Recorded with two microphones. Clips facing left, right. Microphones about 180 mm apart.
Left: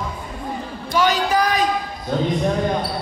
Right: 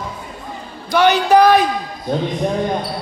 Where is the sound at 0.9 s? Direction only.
75° right (ahead or behind).